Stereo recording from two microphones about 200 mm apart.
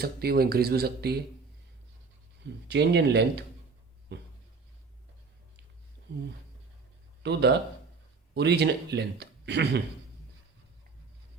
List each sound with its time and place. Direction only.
0.0 s speech: 50° right (ahead or behind)
2.6 s speech: 60° right (ahead or behind)
4.1 s a sound: 60° right (ahead or behind)
7.2 s a man's voice: 60° right (ahead or behind)